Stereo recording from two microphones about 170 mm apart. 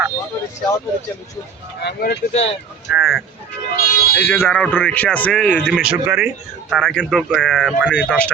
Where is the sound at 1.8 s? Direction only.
75° left (ahead or behind).